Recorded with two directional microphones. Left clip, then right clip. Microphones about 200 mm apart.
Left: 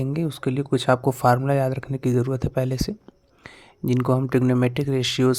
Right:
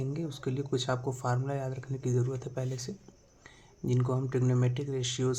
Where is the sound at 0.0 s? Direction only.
45° left (ahead or behind).